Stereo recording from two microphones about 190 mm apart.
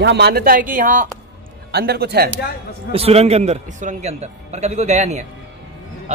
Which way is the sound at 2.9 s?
30° right (ahead or behind).